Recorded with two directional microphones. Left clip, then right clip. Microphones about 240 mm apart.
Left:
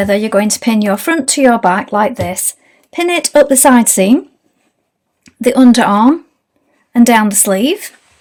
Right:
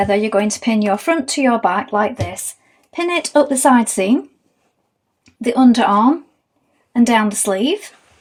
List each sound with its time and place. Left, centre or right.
0.0 s speech: left
5.2 s speech: left